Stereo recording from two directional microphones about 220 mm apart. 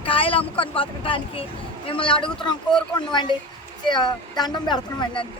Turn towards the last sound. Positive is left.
turn(degrees=20)  # may be behind; listen again after turning